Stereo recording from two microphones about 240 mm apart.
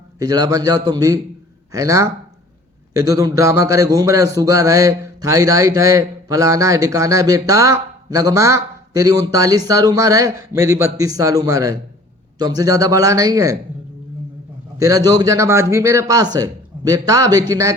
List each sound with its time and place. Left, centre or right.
0.2 s a man's voice: centre
14.8 s a man's voice: centre